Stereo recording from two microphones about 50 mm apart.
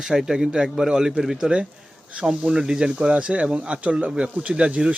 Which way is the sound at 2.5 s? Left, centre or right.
Centre.